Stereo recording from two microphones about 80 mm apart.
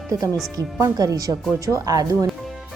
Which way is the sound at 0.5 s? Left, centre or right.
Right.